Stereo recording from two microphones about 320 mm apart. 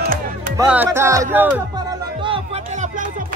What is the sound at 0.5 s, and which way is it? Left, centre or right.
Music, centre.